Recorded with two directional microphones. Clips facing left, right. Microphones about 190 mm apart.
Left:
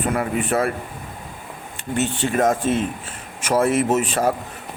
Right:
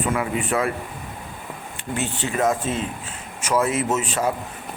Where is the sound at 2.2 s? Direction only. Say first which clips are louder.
Left 2 dB; 50° left (ahead or behind).